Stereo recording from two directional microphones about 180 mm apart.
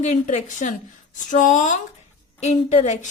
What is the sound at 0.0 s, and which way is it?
A woman's voice, 40° left (ahead or behind).